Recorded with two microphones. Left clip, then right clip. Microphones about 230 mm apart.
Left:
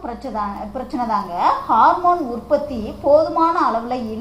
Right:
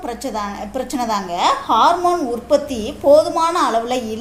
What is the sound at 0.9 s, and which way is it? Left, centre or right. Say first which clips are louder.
A woman's voice: even; right.